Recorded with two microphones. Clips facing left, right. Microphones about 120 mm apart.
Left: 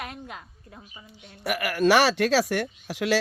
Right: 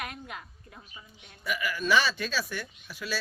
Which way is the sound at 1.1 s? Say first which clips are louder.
Left 5 dB; 75° left (ahead or behind).